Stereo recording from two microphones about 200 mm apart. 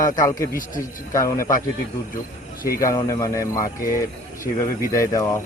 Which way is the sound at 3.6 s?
45° left (ahead or behind).